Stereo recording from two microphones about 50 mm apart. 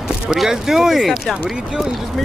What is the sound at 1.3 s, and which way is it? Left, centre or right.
Speech, centre.